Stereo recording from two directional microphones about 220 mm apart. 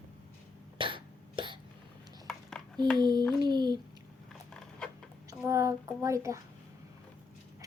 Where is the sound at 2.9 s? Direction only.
20° right (ahead or behind).